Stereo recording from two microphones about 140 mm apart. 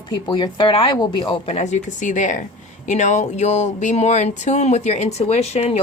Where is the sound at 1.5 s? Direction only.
55° left (ahead or behind).